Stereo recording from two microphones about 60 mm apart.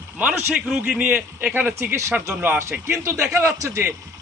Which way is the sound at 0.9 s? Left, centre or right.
Right.